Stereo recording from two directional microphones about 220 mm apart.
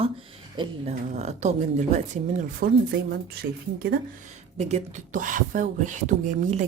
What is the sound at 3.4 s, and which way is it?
Speech, 45° right (ahead or behind).